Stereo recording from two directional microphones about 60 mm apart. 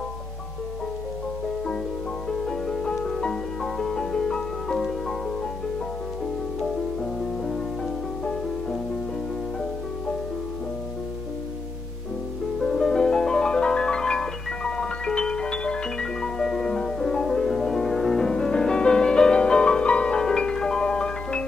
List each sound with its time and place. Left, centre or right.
2.2 s music: centre
6.6 s music: centre
12.5 s music: centre